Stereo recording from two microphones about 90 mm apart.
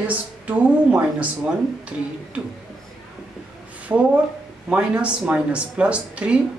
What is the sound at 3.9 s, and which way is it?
Speech, 20° right (ahead or behind).